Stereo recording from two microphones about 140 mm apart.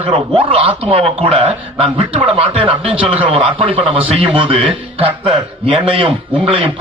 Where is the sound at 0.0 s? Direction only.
40° right (ahead or behind).